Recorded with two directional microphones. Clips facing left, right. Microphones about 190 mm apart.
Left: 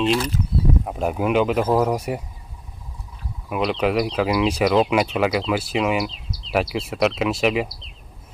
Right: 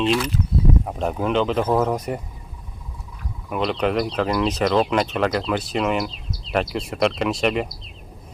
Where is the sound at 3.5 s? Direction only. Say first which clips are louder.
Left 1 dB; 5° left (ahead or behind).